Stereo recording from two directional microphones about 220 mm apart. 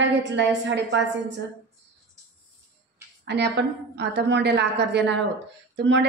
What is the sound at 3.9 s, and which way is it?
A woman's voice, 50° right (ahead or behind).